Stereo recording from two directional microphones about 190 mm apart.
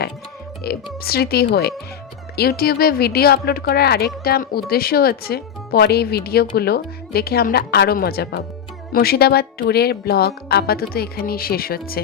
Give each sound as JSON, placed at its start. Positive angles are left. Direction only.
{"t": 0.6, "sound": "speech", "side_deg": 55}